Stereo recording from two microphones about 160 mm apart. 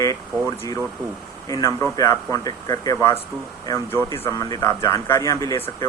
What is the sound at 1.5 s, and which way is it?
Speech, 20° left (ahead or behind).